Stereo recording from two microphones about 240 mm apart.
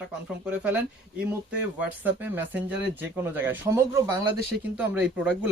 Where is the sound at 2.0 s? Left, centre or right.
Centre.